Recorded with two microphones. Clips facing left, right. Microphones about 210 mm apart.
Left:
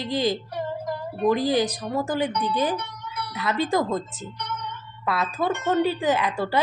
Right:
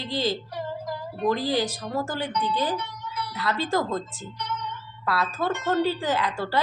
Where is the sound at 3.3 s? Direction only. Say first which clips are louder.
Left 2 dB; 20° left (ahead or behind).